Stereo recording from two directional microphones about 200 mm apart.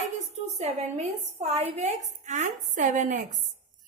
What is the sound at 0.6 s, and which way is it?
A woman's voice, 35° right (ahead or behind).